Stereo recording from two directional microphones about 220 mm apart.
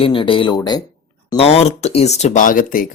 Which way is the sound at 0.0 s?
25° left (ahead or behind).